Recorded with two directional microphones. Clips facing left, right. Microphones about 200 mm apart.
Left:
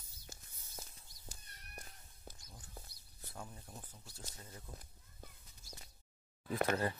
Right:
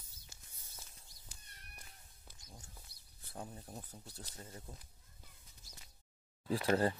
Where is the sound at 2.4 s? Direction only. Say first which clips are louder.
Right 1 dB; 25° right (ahead or behind).